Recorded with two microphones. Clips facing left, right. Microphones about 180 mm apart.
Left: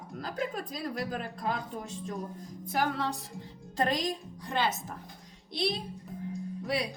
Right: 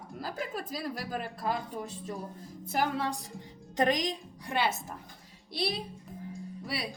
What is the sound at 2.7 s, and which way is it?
A woman's voice, 10° right (ahead or behind).